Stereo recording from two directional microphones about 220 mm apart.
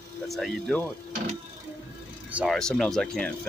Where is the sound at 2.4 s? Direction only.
Centre (ahead or behind).